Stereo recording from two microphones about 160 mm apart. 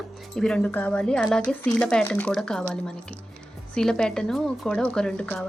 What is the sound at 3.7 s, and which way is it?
A woman's voice, 5° left (ahead or behind).